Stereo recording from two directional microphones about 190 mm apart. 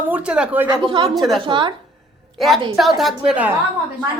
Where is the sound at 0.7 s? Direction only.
20° right (ahead or behind).